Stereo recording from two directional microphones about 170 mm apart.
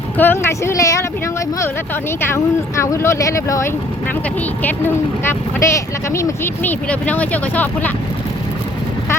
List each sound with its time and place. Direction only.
0.2 s speech: 15° left (ahead or behind)
2.2 s speech: 15° left (ahead or behind)